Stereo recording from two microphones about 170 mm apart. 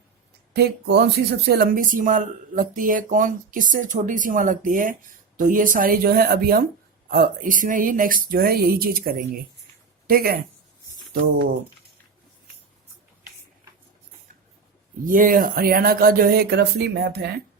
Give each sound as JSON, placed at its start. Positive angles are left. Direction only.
{"t": 0.5, "sound": "speech", "side_deg": -75}
{"t": 15.0, "sound": "speech", "side_deg": -55}